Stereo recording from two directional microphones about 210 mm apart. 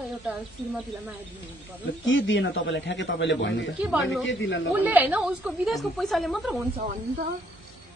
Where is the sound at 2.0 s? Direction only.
65° left (ahead or behind).